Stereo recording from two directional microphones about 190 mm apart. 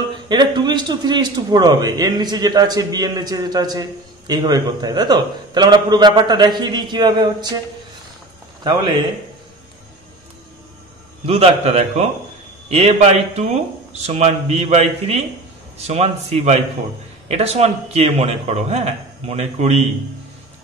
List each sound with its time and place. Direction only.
0.3 s a man's voice: 25° right (ahead or behind)
11.2 s a man's voice: 30° right (ahead or behind)